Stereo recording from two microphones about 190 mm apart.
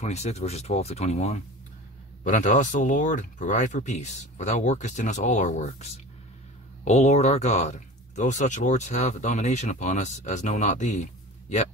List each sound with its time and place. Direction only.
0.0 s speech: 35° left (ahead or behind)